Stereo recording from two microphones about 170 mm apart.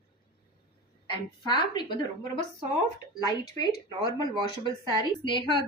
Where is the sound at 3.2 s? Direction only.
20° left (ahead or behind).